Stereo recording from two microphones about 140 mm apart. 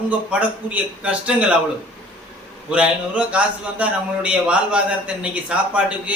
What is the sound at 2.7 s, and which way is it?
A man's voice, 10° right (ahead or behind).